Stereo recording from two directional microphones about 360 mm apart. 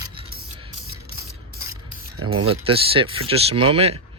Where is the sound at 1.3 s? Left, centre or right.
Right.